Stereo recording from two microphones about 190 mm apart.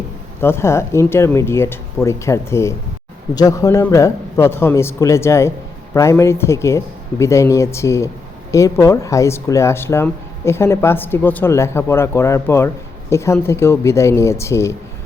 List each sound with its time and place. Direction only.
0.3 s speech: 15° left (ahead or behind)